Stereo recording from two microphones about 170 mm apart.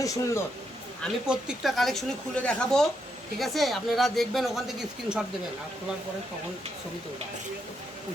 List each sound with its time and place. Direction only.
0.0 s speech: 20° left (ahead or behind)
1.3 s speech: 5° right (ahead or behind)